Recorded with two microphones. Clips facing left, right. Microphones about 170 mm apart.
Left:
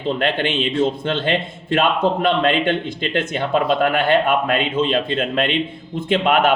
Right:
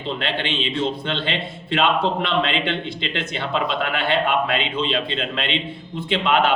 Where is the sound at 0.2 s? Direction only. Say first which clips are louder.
Left 5 dB; 50° left (ahead or behind).